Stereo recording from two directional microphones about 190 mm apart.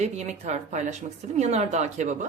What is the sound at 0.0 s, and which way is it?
A woman's voice, 35° right (ahead or behind).